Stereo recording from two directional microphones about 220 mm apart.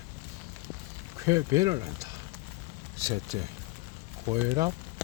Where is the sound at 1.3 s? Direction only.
15° right (ahead or behind).